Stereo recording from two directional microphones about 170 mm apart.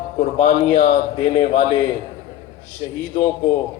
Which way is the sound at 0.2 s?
40° left (ahead or behind).